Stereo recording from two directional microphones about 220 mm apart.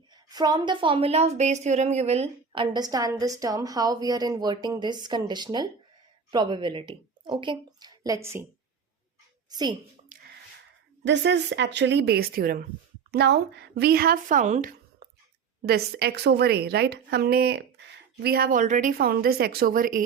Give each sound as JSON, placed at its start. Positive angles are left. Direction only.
{"t": 0.3, "sound": "a woman's voice", "side_deg": -20}
{"t": 9.5, "sound": "a woman's voice", "side_deg": -20}
{"t": 10.1, "sound": "gasp", "side_deg": -35}
{"t": 11.0, "sound": "a woman's voice", "side_deg": -50}